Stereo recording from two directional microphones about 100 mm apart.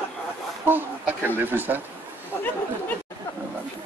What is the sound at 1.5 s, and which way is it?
Speech, 20° right (ahead or behind).